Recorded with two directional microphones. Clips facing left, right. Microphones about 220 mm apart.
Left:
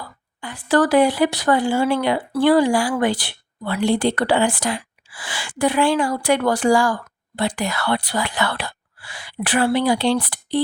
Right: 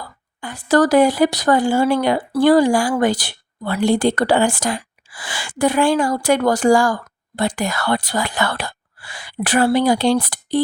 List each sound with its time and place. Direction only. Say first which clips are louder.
0.4 s speech: right 2 dB; 40° right (ahead or behind)